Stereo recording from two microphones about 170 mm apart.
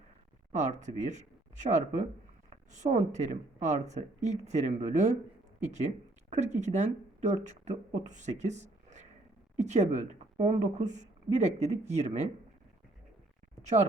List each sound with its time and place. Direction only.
0.5 s a woman's voice: 45° right (ahead or behind)
6.3 s a woman's voice: 45° right (ahead or behind)